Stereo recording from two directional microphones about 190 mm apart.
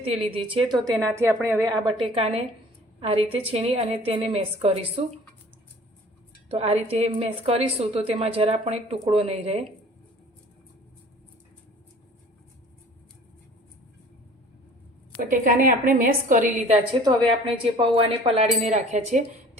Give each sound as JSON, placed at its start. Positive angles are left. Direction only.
{"t": 0.0, "sound": "speech", "side_deg": -30}
{"t": 1.1, "sound": "a woman's voice", "side_deg": -15}
{"t": 2.1, "sound": "a woman's voice", "side_deg": -30}
{"t": 6.5, "sound": "a woman's voice", "side_deg": -35}
{"t": 15.3, "sound": "a woman's voice", "side_deg": -45}